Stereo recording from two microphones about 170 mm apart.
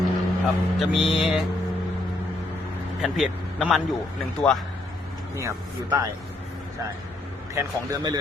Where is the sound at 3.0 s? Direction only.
Centre (ahead or behind).